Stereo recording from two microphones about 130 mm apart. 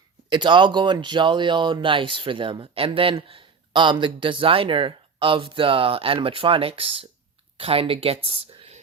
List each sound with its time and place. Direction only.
0.3 s speech: 35° right (ahead or behind)